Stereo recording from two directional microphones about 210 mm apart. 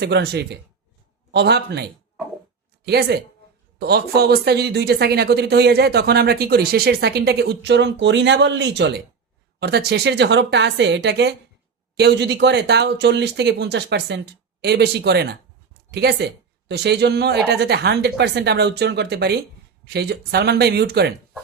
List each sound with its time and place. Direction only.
0.0 s speech: 50° right (ahead or behind)